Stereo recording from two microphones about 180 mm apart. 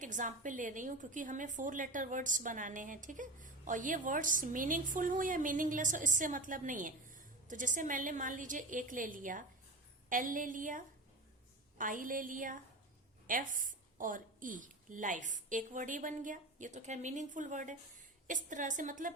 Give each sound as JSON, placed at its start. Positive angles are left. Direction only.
{"t": 0.0, "sound": "a woman's voice", "side_deg": -45}